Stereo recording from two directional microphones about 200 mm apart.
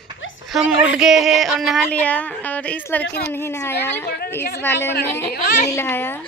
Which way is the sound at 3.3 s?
15° left (ahead or behind).